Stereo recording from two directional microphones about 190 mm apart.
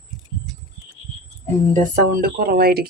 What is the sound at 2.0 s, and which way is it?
Speech, 50° right (ahead or behind).